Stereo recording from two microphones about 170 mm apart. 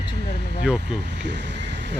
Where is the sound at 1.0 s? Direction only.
90° right.